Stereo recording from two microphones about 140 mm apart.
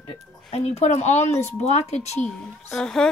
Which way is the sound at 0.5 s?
50° left (ahead or behind).